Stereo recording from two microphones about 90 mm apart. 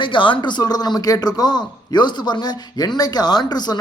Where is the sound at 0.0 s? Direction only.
65° left (ahead or behind).